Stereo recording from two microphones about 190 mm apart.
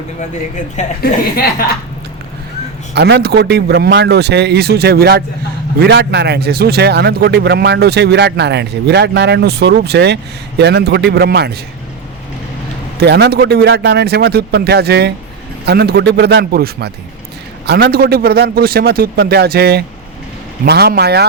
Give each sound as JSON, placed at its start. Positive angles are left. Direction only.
{"t": 1.0, "sound": "speech", "side_deg": 50}
{"t": 2.9, "sound": "a man's voice", "side_deg": -60}
{"t": 13.0, "sound": "a man's voice", "side_deg": -60}